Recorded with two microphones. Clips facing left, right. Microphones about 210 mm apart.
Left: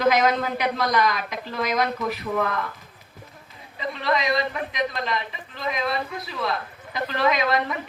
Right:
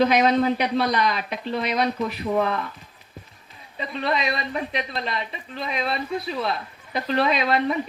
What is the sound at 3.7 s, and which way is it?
A man's voice, 35° right (ahead or behind).